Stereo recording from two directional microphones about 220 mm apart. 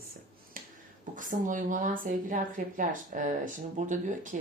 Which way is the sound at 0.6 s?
40° right (ahead or behind).